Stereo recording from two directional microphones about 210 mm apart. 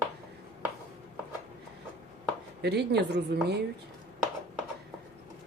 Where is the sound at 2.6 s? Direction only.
50° right (ahead or behind).